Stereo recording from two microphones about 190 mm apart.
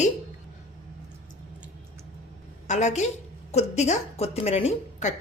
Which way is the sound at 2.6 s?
40° left (ahead or behind).